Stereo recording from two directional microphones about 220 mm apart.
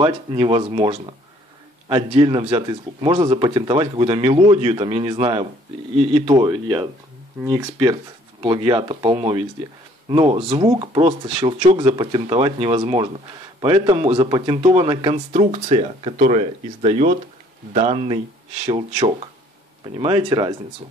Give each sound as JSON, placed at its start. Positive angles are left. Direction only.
{"t": 0.0, "sound": "speech", "side_deg": -25}